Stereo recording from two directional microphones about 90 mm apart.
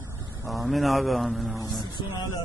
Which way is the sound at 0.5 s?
Centre (ahead or behind).